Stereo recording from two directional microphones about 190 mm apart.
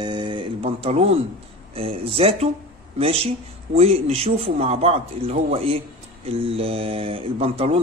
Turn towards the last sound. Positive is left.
turn(degrees=-30)  # may be behind; listen again after turning